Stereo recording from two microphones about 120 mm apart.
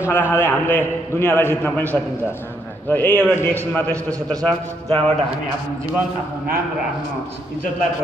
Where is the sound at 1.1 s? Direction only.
20° left (ahead or behind).